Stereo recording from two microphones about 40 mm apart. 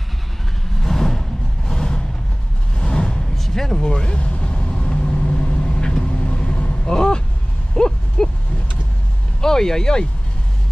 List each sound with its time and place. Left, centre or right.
0.7 s vehicle: centre
2.8 s a sound: left
3.3 s speech: centre
4.3 s vehicle: left
7.0 s a sound: left
9.4 s speech: centre